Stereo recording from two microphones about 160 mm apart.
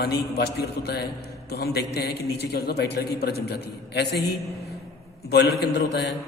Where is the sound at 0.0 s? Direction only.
90° left.